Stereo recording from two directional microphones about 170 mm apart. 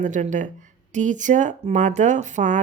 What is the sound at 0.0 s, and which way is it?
Speech, 45° right (ahead or behind).